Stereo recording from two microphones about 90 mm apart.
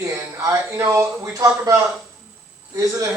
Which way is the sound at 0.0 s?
30° right (ahead or behind).